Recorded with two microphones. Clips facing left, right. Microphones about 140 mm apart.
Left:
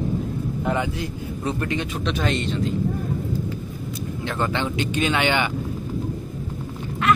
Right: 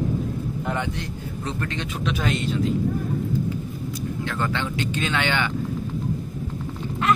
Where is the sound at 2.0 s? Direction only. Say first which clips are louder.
Even; 5° right (ahead or behind).